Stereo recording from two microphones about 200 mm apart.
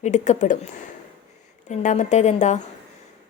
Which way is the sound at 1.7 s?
35° left (ahead or behind).